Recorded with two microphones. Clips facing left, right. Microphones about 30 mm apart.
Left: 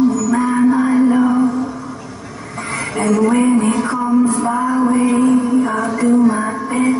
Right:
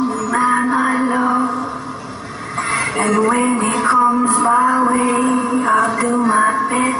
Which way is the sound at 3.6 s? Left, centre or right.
Right.